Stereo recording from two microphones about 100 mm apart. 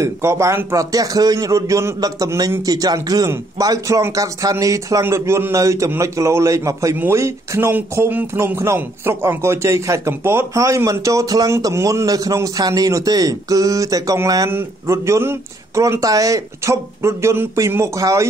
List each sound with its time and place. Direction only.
0.0 s a man's voice: 30° right (ahead or behind)
14.5 s speech: 25° right (ahead or behind)